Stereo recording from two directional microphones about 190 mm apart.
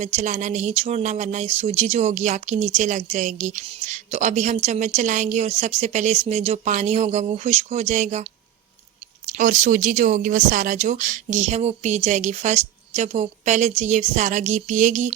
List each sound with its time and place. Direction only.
0.0 s speech: 35° right (ahead or behind)